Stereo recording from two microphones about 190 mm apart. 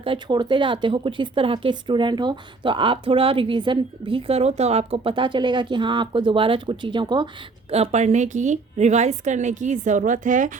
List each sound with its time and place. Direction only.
0.0 s speech: 25° right (ahead or behind)
7.7 s a woman's voice: 35° right (ahead or behind)